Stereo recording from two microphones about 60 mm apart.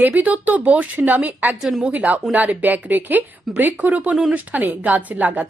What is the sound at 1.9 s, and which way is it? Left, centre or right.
A woman's voice, right.